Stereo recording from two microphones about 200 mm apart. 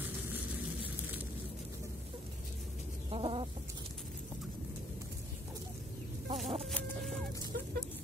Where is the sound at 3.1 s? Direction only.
30° right (ahead or behind).